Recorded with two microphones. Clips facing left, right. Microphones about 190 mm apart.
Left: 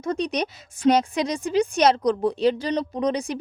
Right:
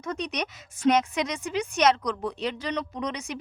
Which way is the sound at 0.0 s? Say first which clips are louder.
Left 6 dB; 30° left (ahead or behind).